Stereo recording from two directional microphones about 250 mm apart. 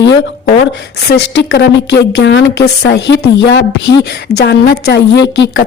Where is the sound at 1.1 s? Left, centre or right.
Left.